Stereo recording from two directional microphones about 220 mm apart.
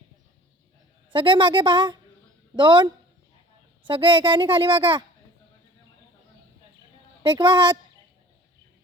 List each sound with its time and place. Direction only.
1.1 s a woman's voice: 20° right (ahead or behind)
7.2 s a woman's voice: 20° right (ahead or behind)